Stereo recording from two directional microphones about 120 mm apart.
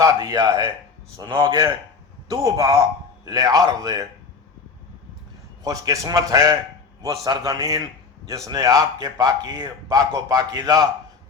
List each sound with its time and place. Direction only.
0.0 s a man's voice: 30° right (ahead or behind)
1.2 s a man's voice: 40° right (ahead or behind)
2.3 s a man's voice: 30° right (ahead or behind)
5.6 s a man's voice: 30° right (ahead or behind)